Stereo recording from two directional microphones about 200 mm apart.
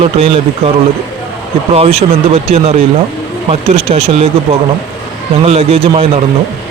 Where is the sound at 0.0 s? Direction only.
30° right (ahead or behind).